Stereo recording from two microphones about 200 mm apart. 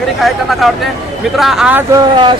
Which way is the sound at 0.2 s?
Centre (ahead or behind).